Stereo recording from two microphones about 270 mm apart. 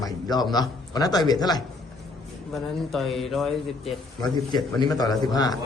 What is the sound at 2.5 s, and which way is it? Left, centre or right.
A man's voice, centre.